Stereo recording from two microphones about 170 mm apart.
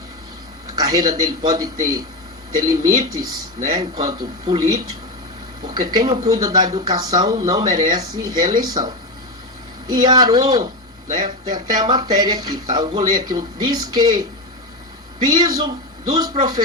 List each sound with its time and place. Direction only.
0.7 s speech: 20° right (ahead or behind)